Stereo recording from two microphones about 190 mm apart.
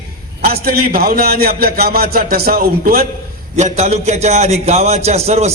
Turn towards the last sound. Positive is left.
turn(degrees=-35)  # may be behind; listen again after turning